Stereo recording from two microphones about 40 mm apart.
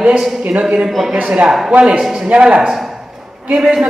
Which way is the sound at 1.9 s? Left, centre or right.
Centre.